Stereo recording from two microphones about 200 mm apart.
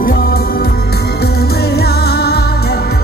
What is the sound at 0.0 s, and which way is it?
Music, 45° left (ahead or behind).